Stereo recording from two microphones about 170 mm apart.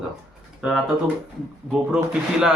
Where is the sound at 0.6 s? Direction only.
5° right (ahead or behind).